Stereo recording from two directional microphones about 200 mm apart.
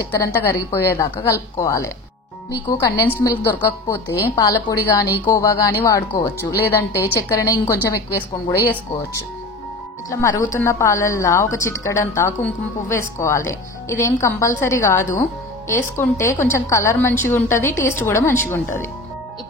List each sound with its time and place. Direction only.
0.2 s speech: 15° left (ahead or behind)
10.0 s speech: 15° left (ahead or behind)